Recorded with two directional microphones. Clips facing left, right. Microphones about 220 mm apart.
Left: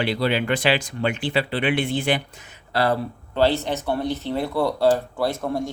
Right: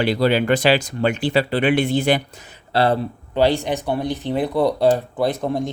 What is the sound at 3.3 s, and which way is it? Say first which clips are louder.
Speech: right 2 dB; 15° right (ahead or behind).